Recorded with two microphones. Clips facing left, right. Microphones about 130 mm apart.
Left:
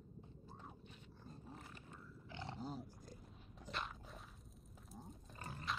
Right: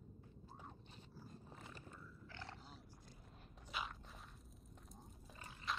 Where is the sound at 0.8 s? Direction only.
35° right (ahead or behind).